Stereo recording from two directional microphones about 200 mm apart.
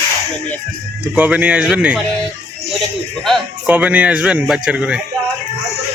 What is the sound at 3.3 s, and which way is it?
Speech, 5° right (ahead or behind).